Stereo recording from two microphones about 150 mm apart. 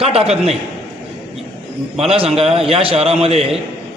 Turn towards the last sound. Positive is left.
turn(degrees=-40)  # may be behind; listen again after turning